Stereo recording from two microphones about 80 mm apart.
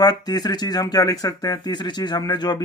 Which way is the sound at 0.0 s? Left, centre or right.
Left.